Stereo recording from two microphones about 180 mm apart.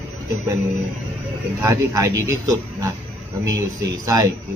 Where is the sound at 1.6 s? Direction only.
15° right (ahead or behind).